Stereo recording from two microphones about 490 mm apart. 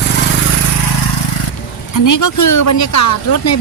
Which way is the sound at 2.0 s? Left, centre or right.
Left.